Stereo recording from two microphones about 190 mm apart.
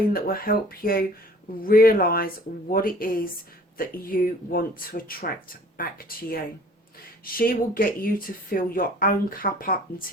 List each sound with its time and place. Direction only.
0.1 s speech: 50° left (ahead or behind)